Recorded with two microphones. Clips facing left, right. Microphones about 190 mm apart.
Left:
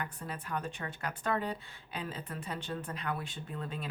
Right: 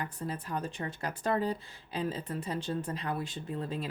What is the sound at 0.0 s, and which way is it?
Speech, 35° right (ahead or behind).